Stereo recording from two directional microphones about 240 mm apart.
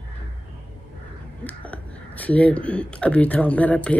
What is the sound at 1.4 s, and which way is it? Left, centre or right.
Speech, centre.